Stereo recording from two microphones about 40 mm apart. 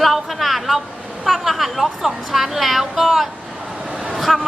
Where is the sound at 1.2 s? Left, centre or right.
Centre.